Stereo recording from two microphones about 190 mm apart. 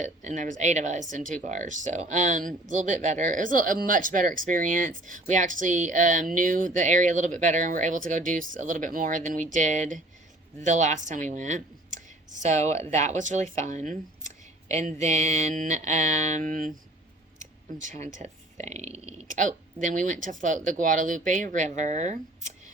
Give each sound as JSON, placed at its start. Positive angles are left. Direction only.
{"t": 0.0, "sound": "speech", "side_deg": -40}
{"t": 17.7, "sound": "speech", "side_deg": -40}